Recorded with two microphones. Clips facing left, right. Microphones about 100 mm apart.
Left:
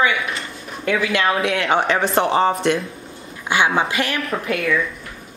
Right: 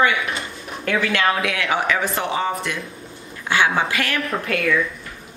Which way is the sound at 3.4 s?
20° left (ahead or behind).